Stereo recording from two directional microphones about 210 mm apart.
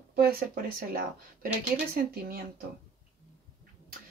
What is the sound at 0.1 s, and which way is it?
Speech, 45° right (ahead or behind).